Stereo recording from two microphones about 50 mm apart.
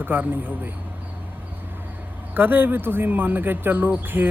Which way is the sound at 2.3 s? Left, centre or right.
Right.